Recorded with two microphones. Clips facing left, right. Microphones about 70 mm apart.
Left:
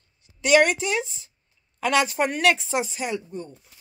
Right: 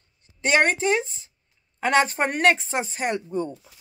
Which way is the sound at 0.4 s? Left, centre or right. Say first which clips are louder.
Left 2 dB; right.